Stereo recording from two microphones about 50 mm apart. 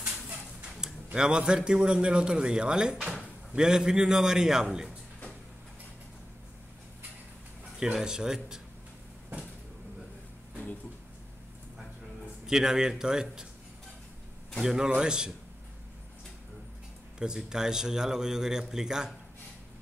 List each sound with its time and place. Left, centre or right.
1.1 s a man's voice: centre
7.8 s a man's voice: centre
12.4 s a man's voice: centre
14.6 s a man's voice: centre
17.2 s a man's voice: centre